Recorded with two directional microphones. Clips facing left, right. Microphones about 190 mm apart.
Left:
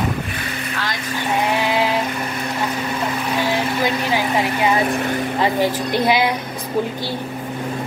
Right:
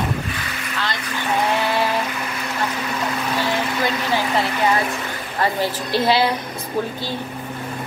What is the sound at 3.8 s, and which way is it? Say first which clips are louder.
Vehicle: left 2 dB; 15° left (ahead or behind).